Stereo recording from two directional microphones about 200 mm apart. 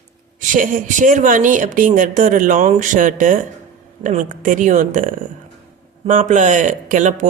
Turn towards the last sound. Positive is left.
turn(degrees=-40)  # may be behind; listen again after turning